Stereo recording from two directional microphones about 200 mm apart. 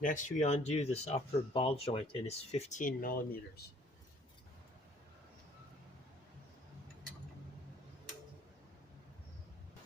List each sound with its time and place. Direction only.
0.0 s speech: 40° left (ahead or behind)